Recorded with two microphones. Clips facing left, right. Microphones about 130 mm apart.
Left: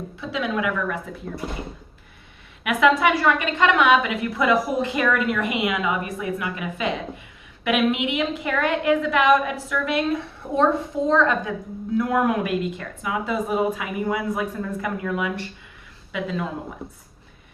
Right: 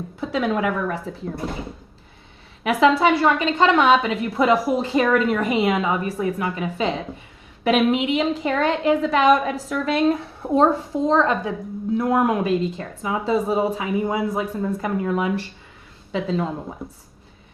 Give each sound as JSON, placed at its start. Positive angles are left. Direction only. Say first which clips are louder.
{"t": 0.2, "sound": "a woman's voice", "louder": "right 4 dB", "side_deg": -40}
{"t": 2.6, "sound": "a woman's voice", "louder": "right 2 dB", "side_deg": -30}